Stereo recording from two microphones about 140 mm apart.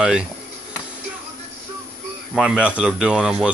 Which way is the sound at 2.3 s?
Centre (ahead or behind).